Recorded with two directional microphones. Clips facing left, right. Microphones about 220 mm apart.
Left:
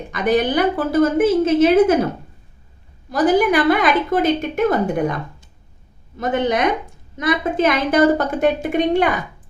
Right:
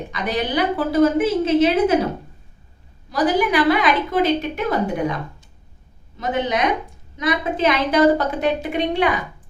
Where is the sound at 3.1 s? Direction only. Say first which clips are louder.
Left 3 dB; 50° left (ahead or behind).